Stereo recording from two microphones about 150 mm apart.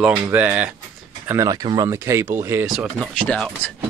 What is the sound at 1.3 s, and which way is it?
Speech, 20° right (ahead or behind).